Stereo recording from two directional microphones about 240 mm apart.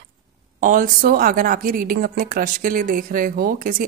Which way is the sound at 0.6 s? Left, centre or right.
Right.